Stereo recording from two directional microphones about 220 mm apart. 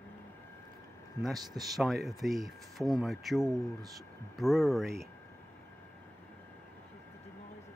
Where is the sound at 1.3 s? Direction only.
15° right (ahead or behind).